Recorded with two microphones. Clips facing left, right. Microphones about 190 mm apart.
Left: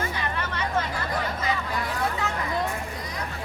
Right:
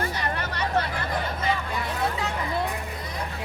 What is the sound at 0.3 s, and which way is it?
Vehicle, 40° right (ahead or behind).